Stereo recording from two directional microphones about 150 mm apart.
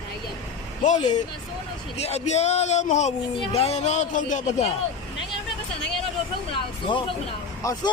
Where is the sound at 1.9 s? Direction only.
45° left (ahead or behind).